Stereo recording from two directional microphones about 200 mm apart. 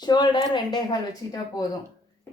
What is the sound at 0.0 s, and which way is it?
A woman's voice, 20° left (ahead or behind).